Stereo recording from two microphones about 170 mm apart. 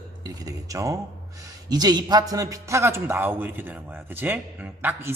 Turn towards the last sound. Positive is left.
turn(degrees=-10)  # may be behind; listen again after turning